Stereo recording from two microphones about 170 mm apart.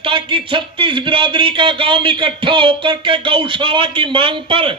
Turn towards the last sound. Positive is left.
turn(degrees=-30)  # may be behind; listen again after turning